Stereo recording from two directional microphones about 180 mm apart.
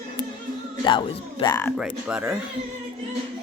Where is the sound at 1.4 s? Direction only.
20° left (ahead or behind).